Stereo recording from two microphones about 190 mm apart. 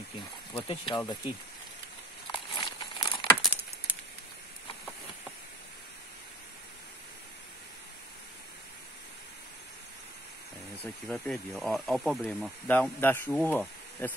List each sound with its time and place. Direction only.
0.5 s speech: 30° left (ahead or behind)
2.3 s crumpling: 25° left (ahead or behind)
3.9 s a sound: 5° right (ahead or behind)
10.8 s speech: centre (ahead or behind)